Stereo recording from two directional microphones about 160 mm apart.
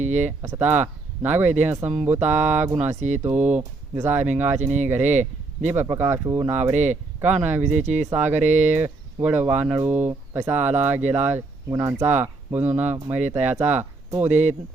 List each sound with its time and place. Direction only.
0.0 s speech: 50° right (ahead or behind)
0.4 s speech: 10° right (ahead or behind)
2.7 s speech: 45° right (ahead or behind)
3.2 s speech: 10° right (ahead or behind)
4.5 s speech: 45° right (ahead or behind)
4.9 s speech: 10° right (ahead or behind)
7.6 s speech: 45° right (ahead or behind)
8.1 s speech: 10° right (ahead or behind)
8.4 s speech: 45° right (ahead or behind)
8.7 s speech: 10° right (ahead or behind)